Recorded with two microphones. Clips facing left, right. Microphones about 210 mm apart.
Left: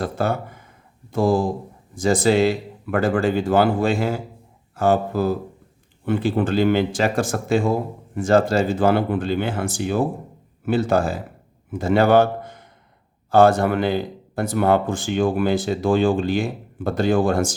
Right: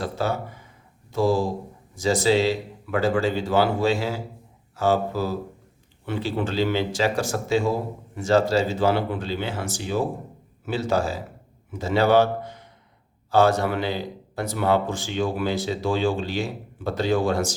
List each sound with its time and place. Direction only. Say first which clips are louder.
0.0 s a man's voice: left 3 dB; 55° left (ahead or behind)